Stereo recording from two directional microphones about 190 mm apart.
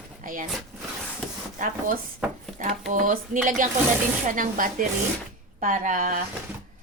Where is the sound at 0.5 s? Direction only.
Centre (ahead or behind).